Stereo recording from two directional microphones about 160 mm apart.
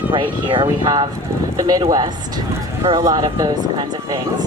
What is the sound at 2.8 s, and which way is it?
Speech, 25° right (ahead or behind).